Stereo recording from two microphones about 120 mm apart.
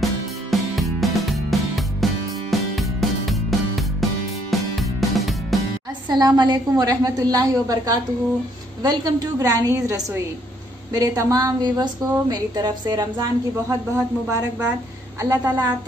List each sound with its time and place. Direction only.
0.0 s music: centre (ahead or behind)
6.0 s a woman's voice: 35° right (ahead or behind)
15.1 s a woman's voice: 25° right (ahead or behind)